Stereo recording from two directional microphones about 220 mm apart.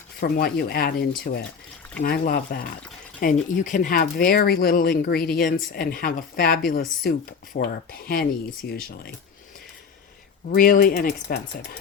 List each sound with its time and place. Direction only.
0.2 s speech: 45° left (ahead or behind)
10.5 s speech: 40° left (ahead or behind)